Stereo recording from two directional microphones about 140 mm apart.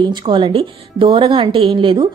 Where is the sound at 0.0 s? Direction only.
35° right (ahead or behind).